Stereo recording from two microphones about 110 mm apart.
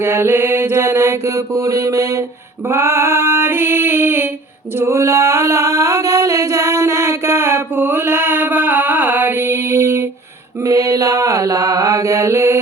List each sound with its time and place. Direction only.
0.0 s mantra: 20° right (ahead or behind)
4.8 s singing: 25° right (ahead or behind)
10.6 s mantra: 30° right (ahead or behind)